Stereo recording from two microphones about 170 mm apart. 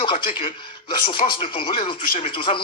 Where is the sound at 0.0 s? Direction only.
30° left (ahead or behind).